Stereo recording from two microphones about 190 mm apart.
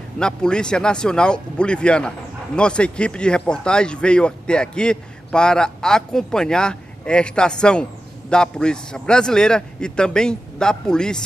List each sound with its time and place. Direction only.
0.2 s speech: 5° left (ahead or behind)